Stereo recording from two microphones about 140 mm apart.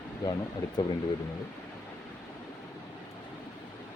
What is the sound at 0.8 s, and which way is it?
Speech, 30° left (ahead or behind).